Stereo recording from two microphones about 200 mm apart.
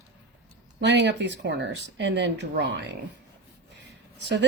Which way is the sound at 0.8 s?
60° right (ahead or behind).